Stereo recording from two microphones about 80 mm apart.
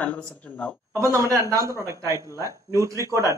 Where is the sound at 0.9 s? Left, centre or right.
Right.